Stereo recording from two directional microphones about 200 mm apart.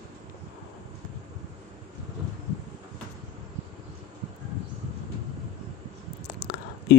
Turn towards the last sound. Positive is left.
turn(degrees=55)  # may be behind; listen again after turning